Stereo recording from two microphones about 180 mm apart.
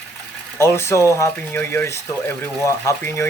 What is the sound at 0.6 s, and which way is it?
Speech, 15° left (ahead or behind).